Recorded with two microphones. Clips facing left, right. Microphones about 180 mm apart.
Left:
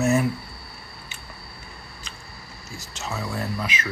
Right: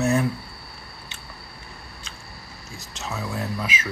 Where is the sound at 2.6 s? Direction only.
Centre (ahead or behind).